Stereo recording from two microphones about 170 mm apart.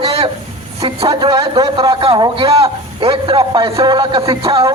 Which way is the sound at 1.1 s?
25° right (ahead or behind).